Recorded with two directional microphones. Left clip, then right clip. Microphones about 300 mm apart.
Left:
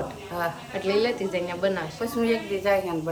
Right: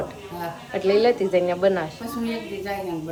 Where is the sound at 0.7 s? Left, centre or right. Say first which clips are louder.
Right 7 dB; centre.